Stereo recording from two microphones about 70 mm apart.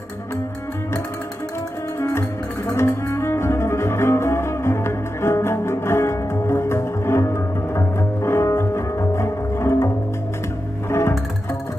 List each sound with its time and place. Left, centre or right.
2.0 s music: left
2.7 s bowed string instrument: left
10.9 s music: left